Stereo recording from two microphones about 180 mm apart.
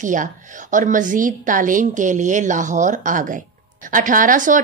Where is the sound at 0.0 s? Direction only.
45° right (ahead or behind).